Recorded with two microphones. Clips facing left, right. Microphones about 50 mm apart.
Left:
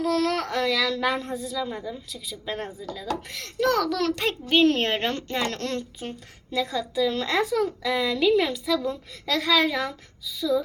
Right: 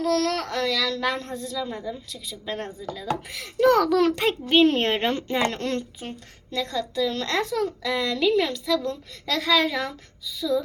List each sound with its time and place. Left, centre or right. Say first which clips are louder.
0.0 s a woman's voice: even; centre